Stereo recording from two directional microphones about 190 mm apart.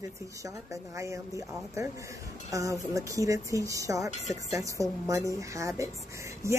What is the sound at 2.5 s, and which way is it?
Speech, 15° right (ahead or behind).